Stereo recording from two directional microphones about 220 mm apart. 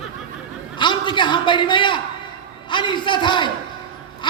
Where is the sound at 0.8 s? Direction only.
20° left (ahead or behind).